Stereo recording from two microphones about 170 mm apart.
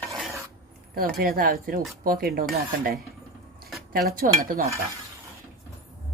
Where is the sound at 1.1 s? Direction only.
60° right (ahead or behind).